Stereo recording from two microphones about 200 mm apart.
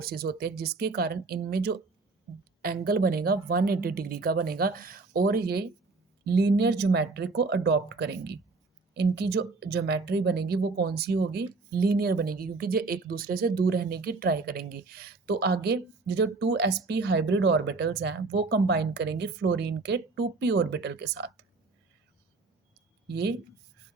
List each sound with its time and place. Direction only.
0.0 s a woman's voice: 50° right (ahead or behind)
23.0 s speech: 55° right (ahead or behind)